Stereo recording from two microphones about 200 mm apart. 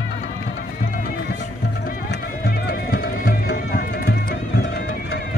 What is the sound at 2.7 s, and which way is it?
Music, 45° left (ahead or behind).